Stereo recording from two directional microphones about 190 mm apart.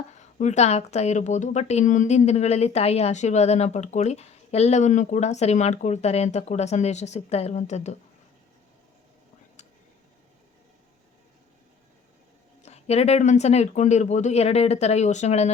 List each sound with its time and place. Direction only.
0.2 s a woman's voice: 40° left (ahead or behind)
12.6 s a woman's voice: 35° left (ahead or behind)